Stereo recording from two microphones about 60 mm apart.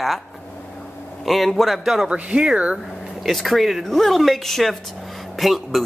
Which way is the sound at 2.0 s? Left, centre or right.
Centre.